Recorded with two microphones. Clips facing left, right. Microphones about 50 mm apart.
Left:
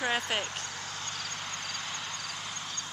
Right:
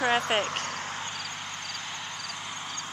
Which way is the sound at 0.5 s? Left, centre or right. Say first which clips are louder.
Right 6 dB; right.